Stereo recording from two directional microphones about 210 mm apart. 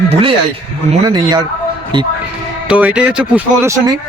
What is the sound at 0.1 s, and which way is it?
A man's voice, 25° right (ahead or behind).